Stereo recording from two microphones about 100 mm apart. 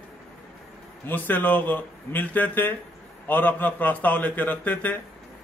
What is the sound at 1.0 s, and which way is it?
A man's voice, 20° left (ahead or behind).